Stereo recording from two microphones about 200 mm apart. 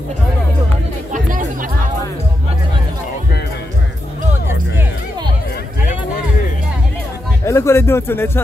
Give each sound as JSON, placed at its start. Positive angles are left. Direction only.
{"t": 1.1, "sound": "music", "side_deg": -40}
{"t": 7.4, "sound": "speech", "side_deg": 15}